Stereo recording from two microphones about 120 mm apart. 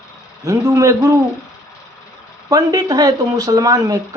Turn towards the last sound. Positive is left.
turn(degrees=-30)  # may be behind; listen again after turning